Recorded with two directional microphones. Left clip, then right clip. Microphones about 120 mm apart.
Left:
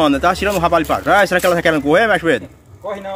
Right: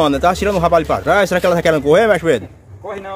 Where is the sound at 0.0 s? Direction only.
25° right (ahead or behind).